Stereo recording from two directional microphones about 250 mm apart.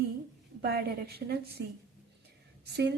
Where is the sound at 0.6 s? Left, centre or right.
Right.